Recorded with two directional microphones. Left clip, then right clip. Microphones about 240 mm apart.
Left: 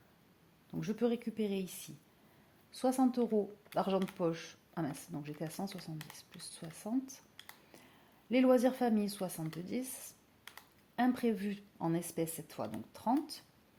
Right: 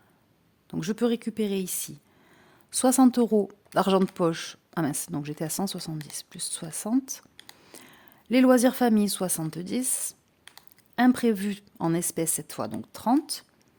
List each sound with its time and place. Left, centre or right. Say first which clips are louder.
0.7 s speech: right 8 dB; right